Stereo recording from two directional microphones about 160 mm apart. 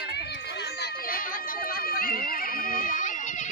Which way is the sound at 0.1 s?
90° left.